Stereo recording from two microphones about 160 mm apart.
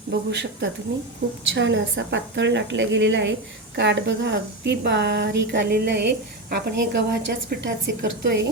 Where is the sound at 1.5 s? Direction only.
90° right.